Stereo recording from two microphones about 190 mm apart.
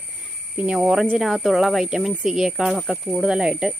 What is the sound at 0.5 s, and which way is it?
Speech, 5° right (ahead or behind).